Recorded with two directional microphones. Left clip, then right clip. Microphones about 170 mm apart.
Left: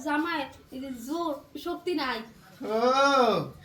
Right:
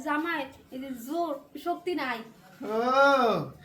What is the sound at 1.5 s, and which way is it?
Speech, 15° right (ahead or behind).